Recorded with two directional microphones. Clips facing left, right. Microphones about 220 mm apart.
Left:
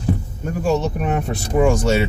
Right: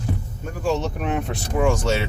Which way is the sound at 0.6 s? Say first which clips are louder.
Left 4 dB; 10° left (ahead or behind).